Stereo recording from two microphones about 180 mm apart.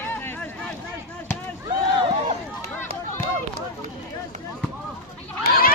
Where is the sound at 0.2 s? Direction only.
10° left (ahead or behind).